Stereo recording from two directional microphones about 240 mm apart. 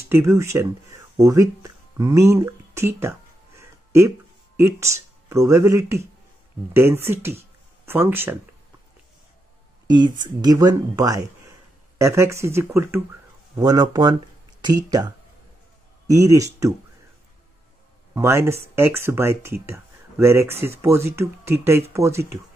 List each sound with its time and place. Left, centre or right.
0.1 s a sound: centre
4.6 s speech: centre
10.4 s speech: centre
18.1 s speech: centre